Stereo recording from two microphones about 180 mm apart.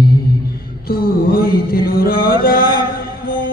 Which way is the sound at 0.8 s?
55° left (ahead or behind).